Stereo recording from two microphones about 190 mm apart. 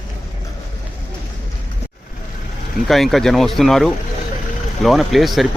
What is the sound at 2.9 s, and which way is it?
Speech, centre (ahead or behind).